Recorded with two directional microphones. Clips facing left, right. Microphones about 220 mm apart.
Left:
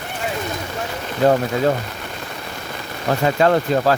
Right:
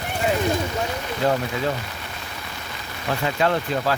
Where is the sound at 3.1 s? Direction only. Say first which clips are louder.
Left 6 dB; 45° left (ahead or behind).